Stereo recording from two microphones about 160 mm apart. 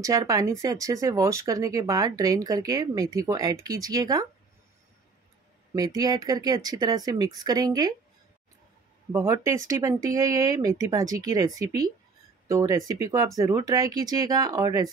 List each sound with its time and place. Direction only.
0.0 s speech: 20° right (ahead or behind)
5.8 s speech: 25° right (ahead or behind)
9.1 s speech: 20° right (ahead or behind)